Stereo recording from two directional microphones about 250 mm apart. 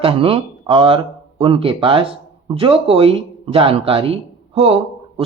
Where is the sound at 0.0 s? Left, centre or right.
Right.